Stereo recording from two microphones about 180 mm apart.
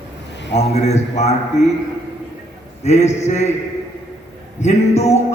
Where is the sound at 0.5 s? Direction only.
35° left (ahead or behind).